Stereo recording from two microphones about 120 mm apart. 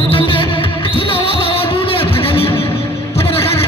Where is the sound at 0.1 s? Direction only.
45° left (ahead or behind).